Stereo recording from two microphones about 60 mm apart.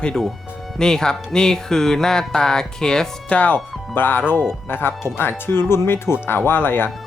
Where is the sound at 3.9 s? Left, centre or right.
Left.